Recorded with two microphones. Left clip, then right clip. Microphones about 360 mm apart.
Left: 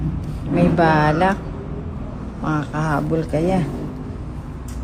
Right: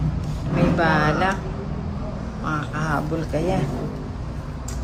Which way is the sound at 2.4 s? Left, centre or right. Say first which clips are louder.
Left 3 dB; centre.